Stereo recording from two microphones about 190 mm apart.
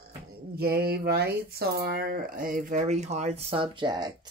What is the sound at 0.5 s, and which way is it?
Speech, 55° right (ahead or behind).